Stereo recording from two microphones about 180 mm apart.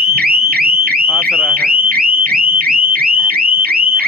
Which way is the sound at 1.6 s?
55° right (ahead or behind).